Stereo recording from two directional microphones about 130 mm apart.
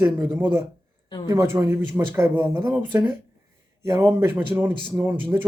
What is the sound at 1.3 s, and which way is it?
Speech, 25° right (ahead or behind).